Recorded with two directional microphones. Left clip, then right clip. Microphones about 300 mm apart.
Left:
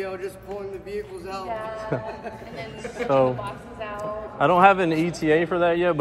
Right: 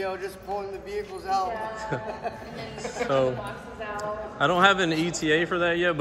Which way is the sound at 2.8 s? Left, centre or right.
Centre.